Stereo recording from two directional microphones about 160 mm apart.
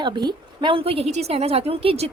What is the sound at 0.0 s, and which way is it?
A woman's voice, 25° right (ahead or behind).